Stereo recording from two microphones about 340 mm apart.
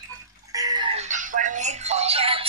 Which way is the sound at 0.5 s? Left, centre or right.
Centre.